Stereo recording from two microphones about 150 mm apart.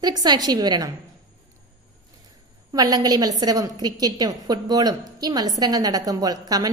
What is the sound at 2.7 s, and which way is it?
A woman's voice, 25° right (ahead or behind).